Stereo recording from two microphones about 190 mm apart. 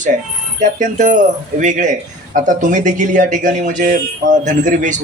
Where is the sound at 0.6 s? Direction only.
40° right (ahead or behind).